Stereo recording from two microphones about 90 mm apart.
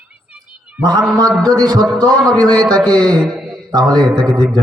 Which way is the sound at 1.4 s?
50° right (ahead or behind).